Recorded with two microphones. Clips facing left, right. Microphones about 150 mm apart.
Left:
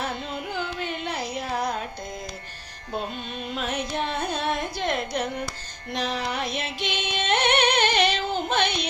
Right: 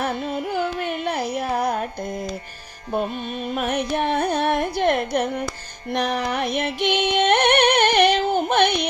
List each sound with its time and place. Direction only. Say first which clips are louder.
0.0 s carnatic music: right 6 dB; 55° right (ahead or behind)
3.5 s carnatic music: right 6 dB; 55° right (ahead or behind)
5.9 s music: right 5 dB; 60° right (ahead or behind)